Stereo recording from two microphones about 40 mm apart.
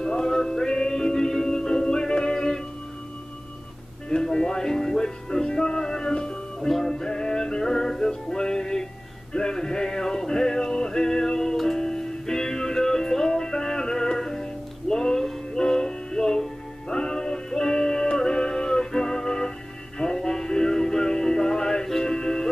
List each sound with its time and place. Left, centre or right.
0.0 s music: centre
4.1 s music: centre